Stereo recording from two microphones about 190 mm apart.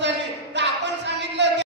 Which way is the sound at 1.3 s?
65° right (ahead or behind).